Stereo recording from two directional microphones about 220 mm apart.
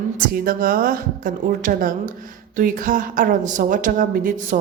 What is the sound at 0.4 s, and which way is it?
A woman's voice, 40° right (ahead or behind).